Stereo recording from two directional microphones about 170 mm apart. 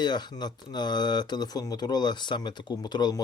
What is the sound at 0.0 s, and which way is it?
Speech, 25° left (ahead or behind).